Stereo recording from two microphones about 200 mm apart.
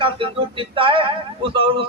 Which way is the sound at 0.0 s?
25° right (ahead or behind).